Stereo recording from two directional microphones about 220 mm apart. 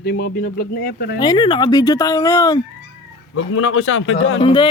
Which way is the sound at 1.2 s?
20° left (ahead or behind).